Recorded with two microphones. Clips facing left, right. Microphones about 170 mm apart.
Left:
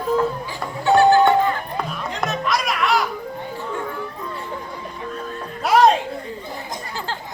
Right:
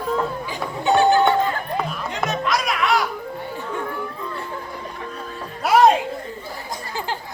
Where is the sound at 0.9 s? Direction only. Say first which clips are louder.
Left 2 dB; 20° right (ahead or behind).